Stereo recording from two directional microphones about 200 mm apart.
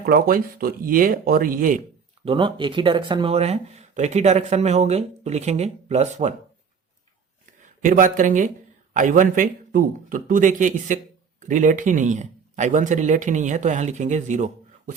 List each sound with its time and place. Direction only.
0.0 s speech: 45° right (ahead or behind)
2.2 s a man's voice: 25° right (ahead or behind)
7.8 s a man's voice: 40° right (ahead or behind)